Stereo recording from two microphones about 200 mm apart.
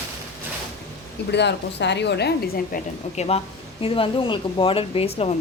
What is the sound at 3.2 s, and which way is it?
Speech, 30° left (ahead or behind).